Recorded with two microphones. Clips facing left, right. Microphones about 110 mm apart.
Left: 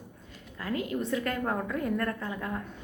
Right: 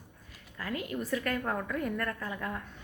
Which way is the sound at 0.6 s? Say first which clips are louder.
Left 4 dB; 30° left (ahead or behind).